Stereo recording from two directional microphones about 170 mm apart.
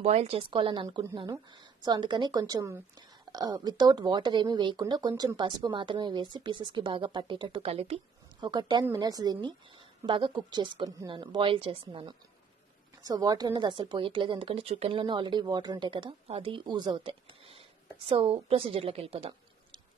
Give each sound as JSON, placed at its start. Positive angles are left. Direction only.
{"t": 0.0, "sound": "a woman's voice", "side_deg": -40}